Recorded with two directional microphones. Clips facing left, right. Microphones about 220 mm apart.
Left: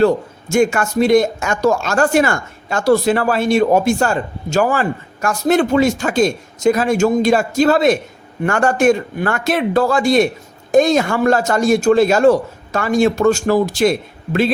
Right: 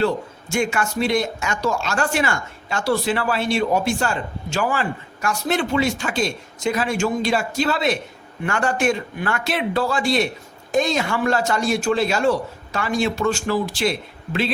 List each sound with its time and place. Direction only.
0.5 s speech: 45° left (ahead or behind)